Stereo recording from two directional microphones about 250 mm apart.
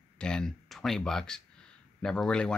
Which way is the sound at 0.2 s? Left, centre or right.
Centre.